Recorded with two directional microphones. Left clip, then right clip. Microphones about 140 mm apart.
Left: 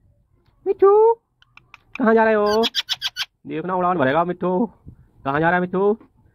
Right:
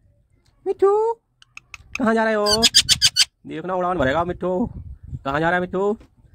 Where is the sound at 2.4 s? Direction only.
45° right (ahead or behind).